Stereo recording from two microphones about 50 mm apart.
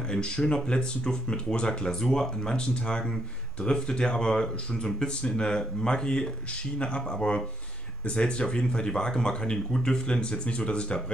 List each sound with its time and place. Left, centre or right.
0.1 s speech: centre